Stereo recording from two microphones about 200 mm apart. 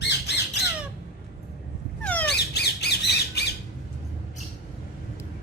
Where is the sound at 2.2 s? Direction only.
55° left (ahead or behind).